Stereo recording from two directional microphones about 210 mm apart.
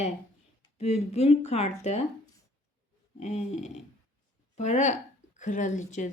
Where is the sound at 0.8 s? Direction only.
30° left (ahead or behind).